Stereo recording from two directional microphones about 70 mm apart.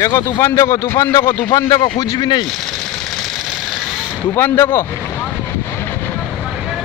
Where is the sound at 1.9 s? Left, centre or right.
Left.